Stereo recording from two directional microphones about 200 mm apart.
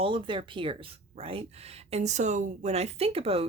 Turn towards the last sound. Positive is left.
turn(degrees=-30)  # may be behind; listen again after turning